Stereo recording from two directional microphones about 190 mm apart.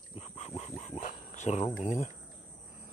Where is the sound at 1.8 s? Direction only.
35° left (ahead or behind).